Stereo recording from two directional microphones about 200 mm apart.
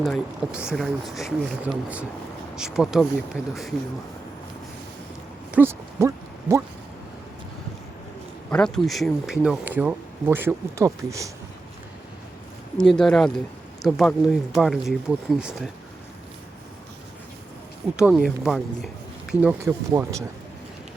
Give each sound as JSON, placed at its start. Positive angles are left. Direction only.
{"t": 0.0, "sound": "speech", "side_deg": 0}
{"t": 5.5, "sound": "a sound", "side_deg": -10}
{"t": 8.4, "sound": "speech", "side_deg": 5}
{"t": 12.7, "sound": "speech", "side_deg": 0}
{"t": 17.9, "sound": "speech", "side_deg": -5}